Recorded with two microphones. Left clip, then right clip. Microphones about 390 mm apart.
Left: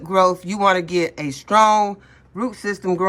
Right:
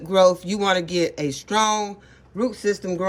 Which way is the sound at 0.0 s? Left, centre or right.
Centre.